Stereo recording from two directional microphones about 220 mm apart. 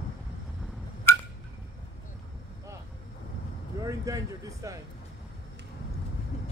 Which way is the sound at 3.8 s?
15° right (ahead or behind).